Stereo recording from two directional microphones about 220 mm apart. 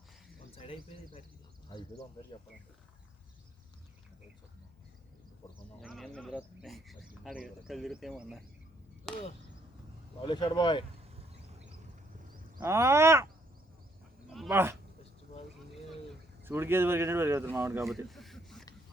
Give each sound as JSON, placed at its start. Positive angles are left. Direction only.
{"t": 0.5, "sound": "speech", "side_deg": 25}
{"t": 5.8, "sound": "speech", "side_deg": 0}
{"t": 10.2, "sound": "speech", "side_deg": 20}
{"t": 12.5, "sound": "speech", "side_deg": -10}
{"t": 14.3, "sound": "speech", "side_deg": -5}
{"t": 16.4, "sound": "speech", "side_deg": -10}
{"t": 17.8, "sound": "a sound", "side_deg": 0}